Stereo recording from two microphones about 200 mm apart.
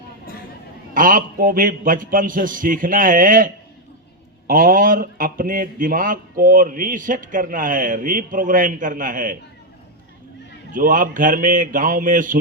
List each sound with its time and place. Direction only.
0.9 s a man's voice: 45° right (ahead or behind)
10.7 s a man's voice: 45° right (ahead or behind)